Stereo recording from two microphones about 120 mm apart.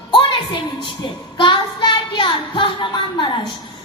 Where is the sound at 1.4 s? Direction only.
40° left (ahead or behind).